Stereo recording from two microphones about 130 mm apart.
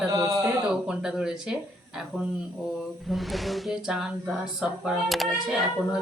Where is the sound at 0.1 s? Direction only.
30° right (ahead or behind).